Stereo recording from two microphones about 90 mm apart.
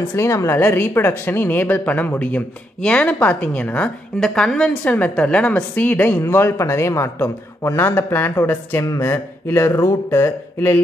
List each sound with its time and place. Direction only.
0.1 s a woman's voice: 30° left (ahead or behind)
0.6 s a man's voice: 20° left (ahead or behind)